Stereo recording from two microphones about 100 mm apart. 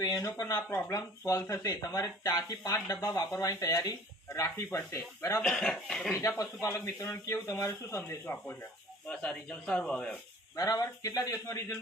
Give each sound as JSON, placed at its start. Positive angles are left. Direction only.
{"t": 0.0, "sound": "speech", "side_deg": 35}
{"t": 5.4, "sound": "speech", "side_deg": 5}
{"t": 6.1, "sound": "speech", "side_deg": 30}
{"t": 9.0, "sound": "speech", "side_deg": 10}
{"t": 10.5, "sound": "speech", "side_deg": 35}